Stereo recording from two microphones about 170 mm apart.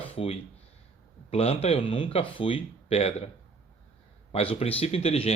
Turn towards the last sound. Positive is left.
turn(degrees=35)  # may be behind; listen again after turning